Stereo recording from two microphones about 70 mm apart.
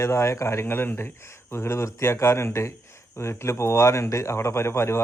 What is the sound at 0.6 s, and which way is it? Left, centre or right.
Speech, left.